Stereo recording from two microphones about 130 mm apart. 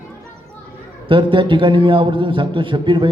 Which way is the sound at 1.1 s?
40° right (ahead or behind).